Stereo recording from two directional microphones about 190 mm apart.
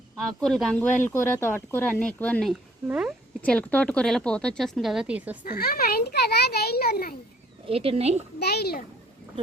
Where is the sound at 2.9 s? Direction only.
5° right (ahead or behind).